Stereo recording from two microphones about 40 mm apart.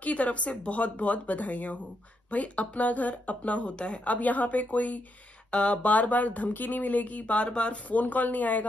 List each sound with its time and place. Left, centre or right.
0.0 s speech: left
5.5 s speech: left